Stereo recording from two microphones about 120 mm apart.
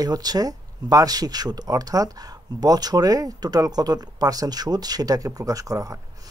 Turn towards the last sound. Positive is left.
turn(degrees=-30)  # may be behind; listen again after turning